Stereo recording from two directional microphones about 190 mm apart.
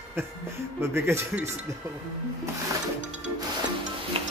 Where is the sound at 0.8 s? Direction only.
15° right (ahead or behind).